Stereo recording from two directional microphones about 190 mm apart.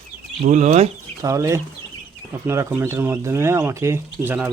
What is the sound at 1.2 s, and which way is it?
Speech, 15° right (ahead or behind).